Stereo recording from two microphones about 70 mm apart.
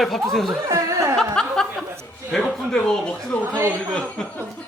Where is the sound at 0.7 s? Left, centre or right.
Right.